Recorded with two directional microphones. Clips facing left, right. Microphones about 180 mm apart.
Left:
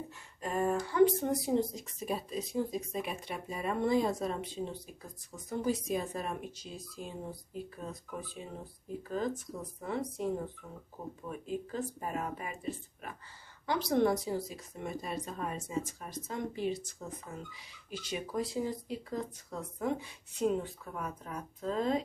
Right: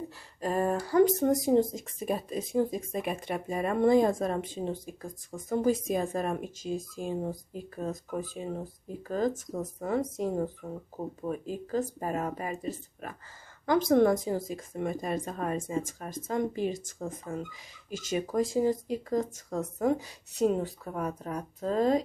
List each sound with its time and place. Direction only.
0.4 s speech: 35° right (ahead or behind)